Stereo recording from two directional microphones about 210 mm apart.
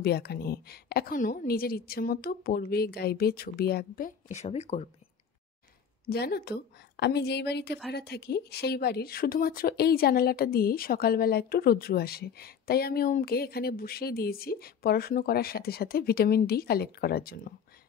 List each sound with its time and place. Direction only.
0.0 s speech: 50° left (ahead or behind); by 4.8 s 30° left (ahead or behind)
6.0 s speech: 50° left (ahead or behind)